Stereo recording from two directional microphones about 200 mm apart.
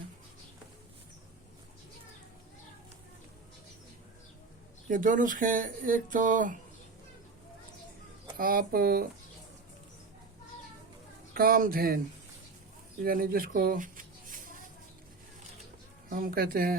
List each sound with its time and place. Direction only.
4.9 s speech: 40° right (ahead or behind)
8.4 s speech: 45° right (ahead or behind)
11.3 s speech: 45° right (ahead or behind)
13.0 s speech: 45° right (ahead or behind)
16.0 s speech: 45° right (ahead or behind)